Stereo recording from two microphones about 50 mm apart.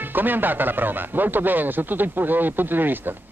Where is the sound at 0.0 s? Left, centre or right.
Right.